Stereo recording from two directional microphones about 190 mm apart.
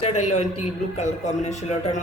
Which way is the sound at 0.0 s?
35° left (ahead or behind).